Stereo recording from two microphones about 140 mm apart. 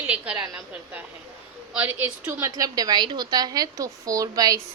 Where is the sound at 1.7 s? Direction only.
10° right (ahead or behind).